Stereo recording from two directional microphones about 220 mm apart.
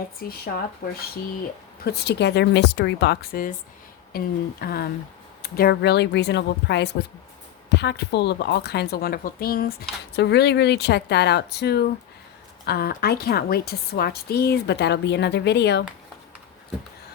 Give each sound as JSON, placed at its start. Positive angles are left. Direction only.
{"t": 0.2, "sound": "a woman's voice", "side_deg": 45}
{"t": 1.8, "sound": "a woman's voice", "side_deg": 45}